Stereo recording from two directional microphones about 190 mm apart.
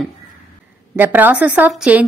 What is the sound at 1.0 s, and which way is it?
A woman's voice, 10° right (ahead or behind).